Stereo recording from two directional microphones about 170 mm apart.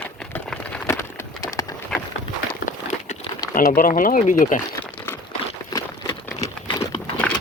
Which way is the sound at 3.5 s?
55° left (ahead or behind).